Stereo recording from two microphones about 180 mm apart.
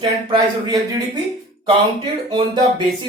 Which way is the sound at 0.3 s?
20° right (ahead or behind).